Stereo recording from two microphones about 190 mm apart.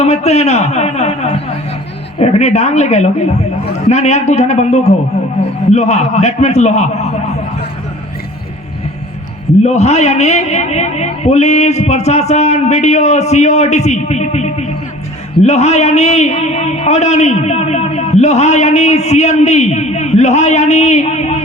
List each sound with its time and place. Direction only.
0.0 s a man's voice: 35° left (ahead or behind)
9.6 s a man's voice: 35° left (ahead or behind)